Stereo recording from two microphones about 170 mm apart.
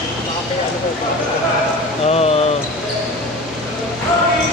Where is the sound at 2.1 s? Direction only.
35° left (ahead or behind).